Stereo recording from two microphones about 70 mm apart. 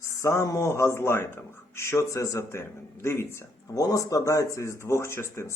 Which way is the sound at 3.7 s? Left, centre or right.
Left.